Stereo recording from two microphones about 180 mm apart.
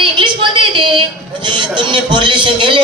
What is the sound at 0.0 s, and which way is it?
A man's voice, 25° right (ahead or behind).